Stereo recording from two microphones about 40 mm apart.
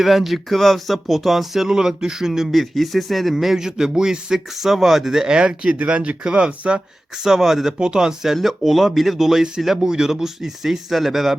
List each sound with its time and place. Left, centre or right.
0.0 s speech: centre
2.5 s a man's voice: centre
5.3 s speech: right
7.3 s a man's voice: centre